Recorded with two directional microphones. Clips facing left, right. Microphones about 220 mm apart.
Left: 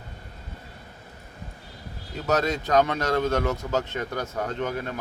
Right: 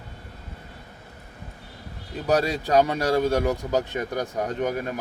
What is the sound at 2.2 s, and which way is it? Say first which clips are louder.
Speech: right 2 dB; 15° right (ahead or behind).